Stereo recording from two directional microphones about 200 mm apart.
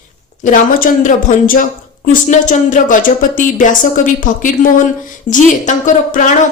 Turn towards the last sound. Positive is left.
turn(degrees=40)  # may be behind; listen again after turning